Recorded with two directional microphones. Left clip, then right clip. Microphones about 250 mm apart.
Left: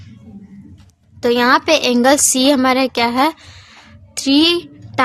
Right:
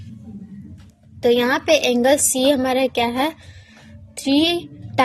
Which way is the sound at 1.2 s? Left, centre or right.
Left.